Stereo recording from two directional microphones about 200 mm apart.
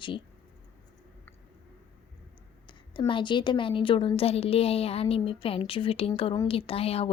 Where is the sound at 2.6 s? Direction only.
25° left (ahead or behind).